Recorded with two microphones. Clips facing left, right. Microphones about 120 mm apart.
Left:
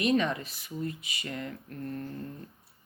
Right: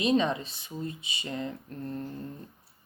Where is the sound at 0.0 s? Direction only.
20° right (ahead or behind).